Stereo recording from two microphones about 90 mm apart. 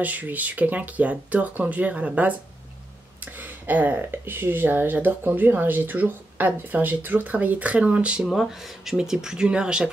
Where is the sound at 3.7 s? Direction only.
20° right (ahead or behind).